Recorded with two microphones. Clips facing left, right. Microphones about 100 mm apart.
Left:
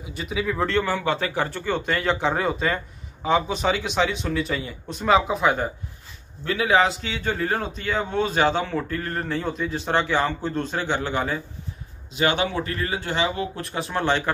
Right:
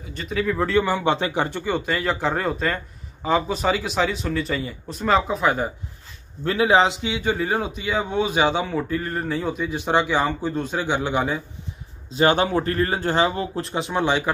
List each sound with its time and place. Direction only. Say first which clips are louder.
0.0 s speech: right 2 dB; 10° left (ahead or behind)
0.7 s a man's voice: right 3 dB; 10° right (ahead or behind)
6.4 s a man's voice: right 2 dB; 30° right (ahead or behind); by 11.4 s 15° right (ahead or behind)
12.1 s a man's voice: right 4 dB; 35° right (ahead or behind)
13.6 s a man's voice: right 3 dB; 25° right (ahead or behind)